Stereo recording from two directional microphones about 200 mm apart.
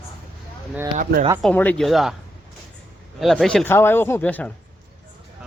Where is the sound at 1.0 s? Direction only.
45° right (ahead or behind).